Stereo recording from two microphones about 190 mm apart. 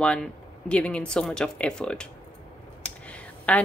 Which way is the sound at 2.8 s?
5° left (ahead or behind).